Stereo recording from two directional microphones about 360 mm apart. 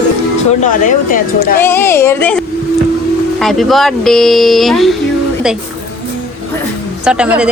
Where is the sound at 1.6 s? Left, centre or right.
Centre.